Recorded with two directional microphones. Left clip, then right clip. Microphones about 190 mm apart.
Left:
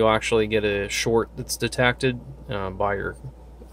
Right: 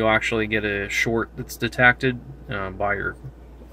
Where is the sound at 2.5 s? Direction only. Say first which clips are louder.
Even; 15° left (ahead or behind).